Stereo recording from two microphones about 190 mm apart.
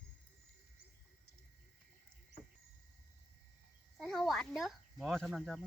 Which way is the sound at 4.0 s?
Centre (ahead or behind).